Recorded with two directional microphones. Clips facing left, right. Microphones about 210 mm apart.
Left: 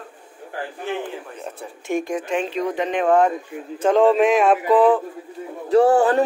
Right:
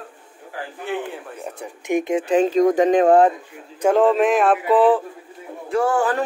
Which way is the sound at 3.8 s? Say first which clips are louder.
Even; 5° right (ahead or behind).